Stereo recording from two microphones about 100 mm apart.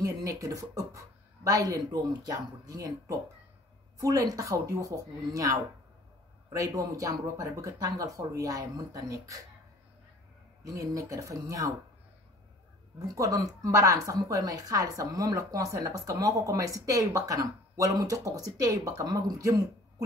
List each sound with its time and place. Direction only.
0.0 s a woman's voice: 35° right (ahead or behind)
10.6 s a woman's voice: 35° right (ahead or behind)
13.1 s a woman's voice: 35° right (ahead or behind)
19.0 s a woman's voice: 45° right (ahead or behind)